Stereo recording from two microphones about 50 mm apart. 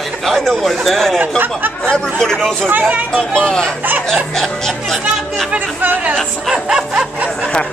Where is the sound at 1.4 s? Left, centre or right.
Right.